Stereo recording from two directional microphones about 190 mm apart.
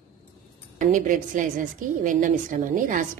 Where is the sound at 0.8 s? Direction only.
40° right (ahead or behind).